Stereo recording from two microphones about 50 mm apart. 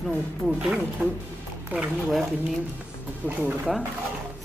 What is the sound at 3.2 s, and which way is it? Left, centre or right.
Speech, left.